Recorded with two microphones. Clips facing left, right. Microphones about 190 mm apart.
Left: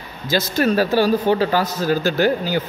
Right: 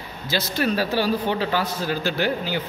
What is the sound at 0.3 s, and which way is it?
A man's voice, 45° left (ahead or behind).